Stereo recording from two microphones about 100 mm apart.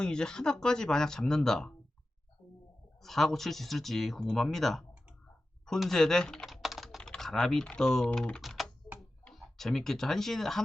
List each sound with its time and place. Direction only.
0.0 s speech: 10° left (ahead or behind)
3.0 s speech: centre (ahead or behind)
5.6 s typing: 5° left (ahead or behind)
7.1 s speech: 5° left (ahead or behind)
9.0 s tick-tock: centre (ahead or behind)